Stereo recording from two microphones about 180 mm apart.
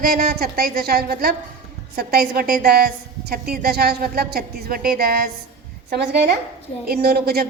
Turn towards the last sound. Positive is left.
turn(degrees=-60)  # may be behind; listen again after turning